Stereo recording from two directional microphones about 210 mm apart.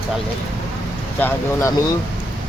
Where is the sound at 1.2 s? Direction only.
10° left (ahead or behind).